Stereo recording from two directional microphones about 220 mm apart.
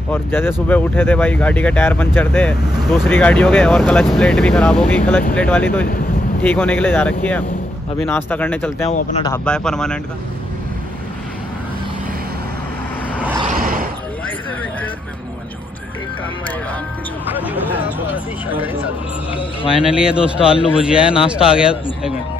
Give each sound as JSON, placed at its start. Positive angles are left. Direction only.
{"t": 0.1, "sound": "speech", "side_deg": 10}
{"t": 2.7, "sound": "speech", "side_deg": 0}
{"t": 8.8, "sound": "speech", "side_deg": 30}
{"t": 9.3, "sound": "speech", "side_deg": 5}
{"t": 13.5, "sound": "vehicle", "side_deg": -40}
{"t": 17.4, "sound": "a sound", "side_deg": -10}
{"t": 18.5, "sound": "speech", "side_deg": -10}
{"t": 19.8, "sound": "speech", "side_deg": -5}